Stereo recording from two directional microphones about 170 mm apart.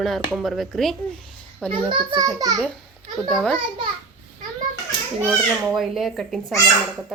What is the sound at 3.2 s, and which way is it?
Speech, 5° left (ahead or behind).